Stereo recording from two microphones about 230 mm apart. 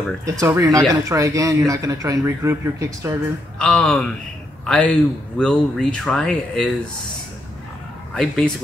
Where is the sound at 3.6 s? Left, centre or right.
Centre.